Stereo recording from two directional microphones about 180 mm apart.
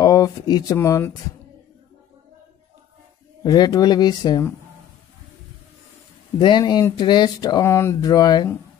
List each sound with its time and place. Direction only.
0.0 s speech: 20° left (ahead or behind)
3.4 s speech: 20° left (ahead or behind)
6.4 s speech: 25° left (ahead or behind)